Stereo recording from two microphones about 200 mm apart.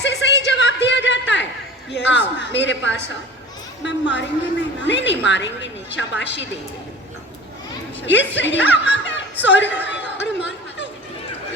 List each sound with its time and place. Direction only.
0.0 s a sound: 60° left (ahead or behind)
1.9 s a woman's voice: 60° left (ahead or behind)
8.0 s a woman's voice: 65° left (ahead or behind)
9.8 s chatter: 60° left (ahead or behind)